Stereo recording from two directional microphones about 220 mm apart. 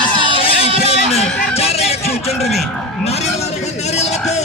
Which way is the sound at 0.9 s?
30° left (ahead or behind).